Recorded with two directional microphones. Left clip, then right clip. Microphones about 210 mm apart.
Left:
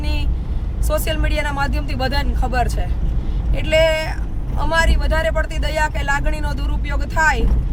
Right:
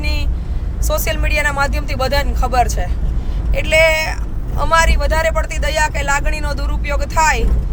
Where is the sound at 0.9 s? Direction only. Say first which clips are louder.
Right 3 dB; 5° left (ahead or behind).